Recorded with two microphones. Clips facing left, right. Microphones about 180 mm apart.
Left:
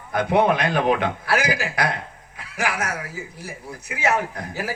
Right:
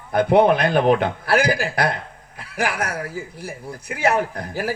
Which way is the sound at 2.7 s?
55° right (ahead or behind).